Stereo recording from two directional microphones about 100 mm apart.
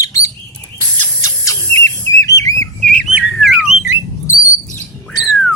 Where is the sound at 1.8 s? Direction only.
35° left (ahead or behind).